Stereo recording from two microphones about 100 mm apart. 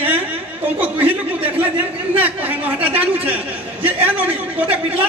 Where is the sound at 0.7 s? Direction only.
15° right (ahead or behind).